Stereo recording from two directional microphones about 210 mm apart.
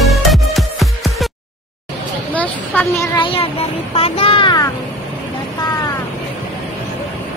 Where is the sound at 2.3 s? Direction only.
10° left (ahead or behind).